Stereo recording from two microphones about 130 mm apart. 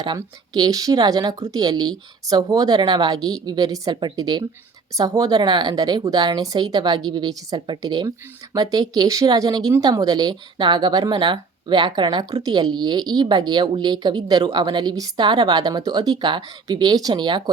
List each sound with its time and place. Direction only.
0.0 s speech: 30° right (ahead or behind)